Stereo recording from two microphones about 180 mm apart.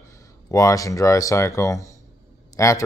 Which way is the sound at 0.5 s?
15° left (ahead or behind).